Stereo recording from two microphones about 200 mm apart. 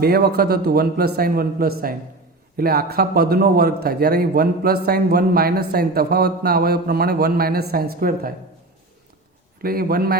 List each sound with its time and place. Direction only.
0.0 s a man's voice: 50° right (ahead or behind)
9.6 s a man's voice: 50° right (ahead or behind)